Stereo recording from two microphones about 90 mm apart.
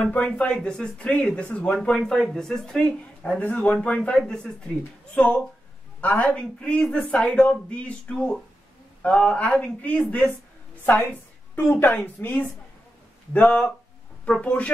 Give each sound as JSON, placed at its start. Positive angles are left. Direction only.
{"t": 0.0, "sound": "speech", "side_deg": 15}
{"t": 11.5, "sound": "a woman's voice", "side_deg": 25}
{"t": 13.3, "sound": "speech", "side_deg": 10}